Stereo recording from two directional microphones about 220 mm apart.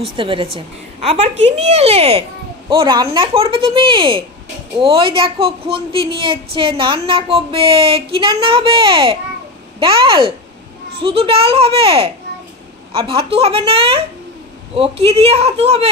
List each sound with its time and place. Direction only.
0.0 s a woman's voice: 25° right (ahead or behind)